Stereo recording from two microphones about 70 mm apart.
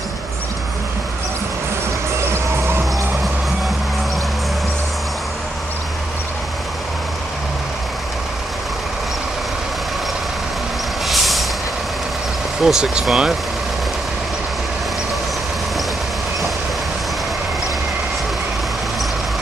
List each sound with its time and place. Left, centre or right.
2.3 s basketball bounce: right
11.1 s vehicle: centre
12.6 s speech: centre